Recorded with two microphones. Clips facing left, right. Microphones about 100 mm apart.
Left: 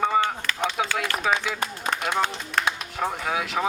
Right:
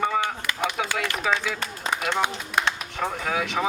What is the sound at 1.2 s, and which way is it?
Speech, 15° left (ahead or behind).